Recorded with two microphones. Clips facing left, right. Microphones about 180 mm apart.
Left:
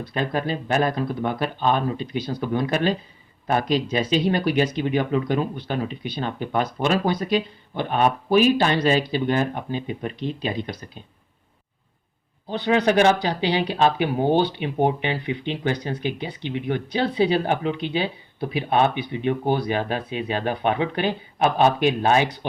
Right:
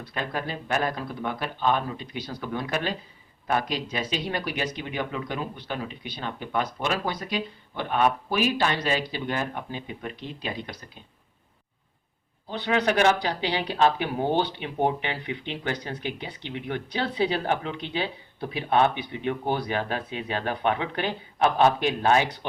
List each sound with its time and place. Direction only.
0.1 s speech: 25° left (ahead or behind)
12.5 s speech: 20° left (ahead or behind)